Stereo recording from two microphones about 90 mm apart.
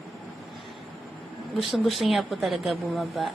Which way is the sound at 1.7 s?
Centre (ahead or behind).